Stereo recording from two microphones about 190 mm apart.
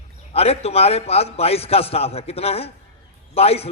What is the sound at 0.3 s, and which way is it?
A man's voice, 30° left (ahead or behind).